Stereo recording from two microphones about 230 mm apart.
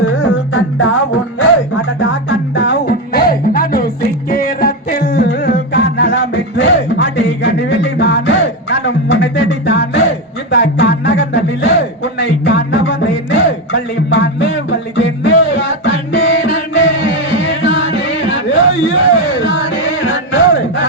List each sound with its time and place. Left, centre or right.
0.0 s music: left